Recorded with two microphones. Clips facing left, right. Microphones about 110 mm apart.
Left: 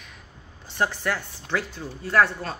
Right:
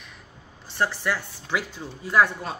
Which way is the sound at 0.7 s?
50° left (ahead or behind).